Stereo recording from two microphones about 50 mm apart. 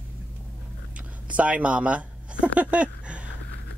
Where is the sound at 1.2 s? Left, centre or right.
Right.